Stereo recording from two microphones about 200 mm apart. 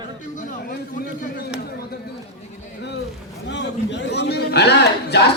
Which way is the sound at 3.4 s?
60° left (ahead or behind).